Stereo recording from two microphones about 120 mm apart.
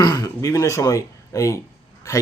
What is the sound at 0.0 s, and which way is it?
Speech, 35° left (ahead or behind).